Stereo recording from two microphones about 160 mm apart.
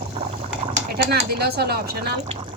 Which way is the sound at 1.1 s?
80° right.